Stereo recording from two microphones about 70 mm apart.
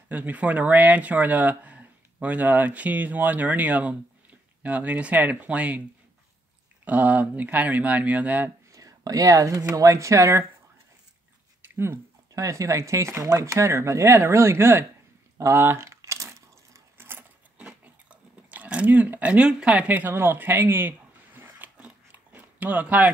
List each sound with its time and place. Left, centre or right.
0.1 s speech: right
6.8 s speech: right
8.7 s speech: right
11.6 s a sound: right
12.4 s speech: right
15.5 s a sound: right
17.6 s biting: centre
18.5 s speech: centre
21.4 s biting: right